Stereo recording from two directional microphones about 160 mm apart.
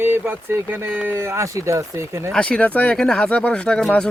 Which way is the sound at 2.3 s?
5° left (ahead or behind).